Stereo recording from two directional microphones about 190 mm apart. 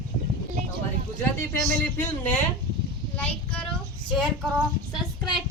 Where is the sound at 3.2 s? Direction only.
5° left (ahead or behind).